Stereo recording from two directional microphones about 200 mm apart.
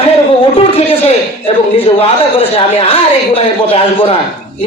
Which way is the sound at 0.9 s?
25° left (ahead or behind).